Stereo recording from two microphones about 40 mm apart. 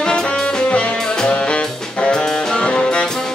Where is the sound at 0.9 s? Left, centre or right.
Centre.